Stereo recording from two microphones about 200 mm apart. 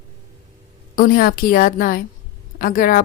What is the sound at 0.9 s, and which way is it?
A woman's voice, 45° left (ahead or behind).